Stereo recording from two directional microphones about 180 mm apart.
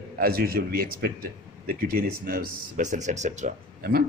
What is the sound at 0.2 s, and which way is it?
Speech, 55° right (ahead or behind).